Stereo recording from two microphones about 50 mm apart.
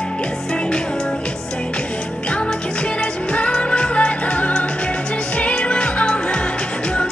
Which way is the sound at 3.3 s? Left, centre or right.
Left.